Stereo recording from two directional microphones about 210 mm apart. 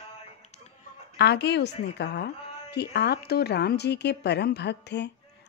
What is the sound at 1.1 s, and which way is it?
A woman's voice, 50° left (ahead or behind).